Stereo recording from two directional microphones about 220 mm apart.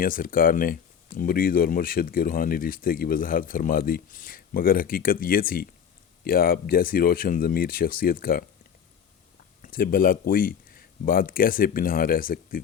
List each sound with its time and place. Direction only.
0.0 s speech: 40° left (ahead or behind)
9.6 s speech: 40° left (ahead or behind)